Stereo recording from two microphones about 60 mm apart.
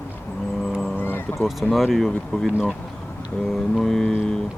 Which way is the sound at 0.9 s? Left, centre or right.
Left.